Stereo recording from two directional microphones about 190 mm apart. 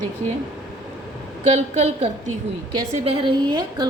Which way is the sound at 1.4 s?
35° right (ahead or behind).